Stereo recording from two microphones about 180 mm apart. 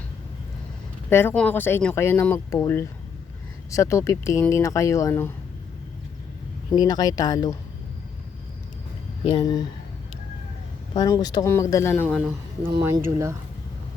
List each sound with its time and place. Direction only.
1.1 s speech: 10° left (ahead or behind)
6.7 s speech: 20° left (ahead or behind)
9.2 s speech: 25° left (ahead or behind)
10.9 s speech: 20° left (ahead or behind)
12.8 s speech: 15° right (ahead or behind)